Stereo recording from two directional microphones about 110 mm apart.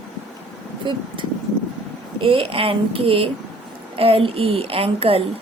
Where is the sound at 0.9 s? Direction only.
45° right (ahead or behind).